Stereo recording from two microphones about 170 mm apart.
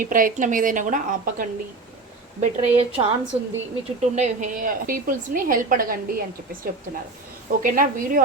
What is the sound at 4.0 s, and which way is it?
A woman's voice, 45° right (ahead or behind).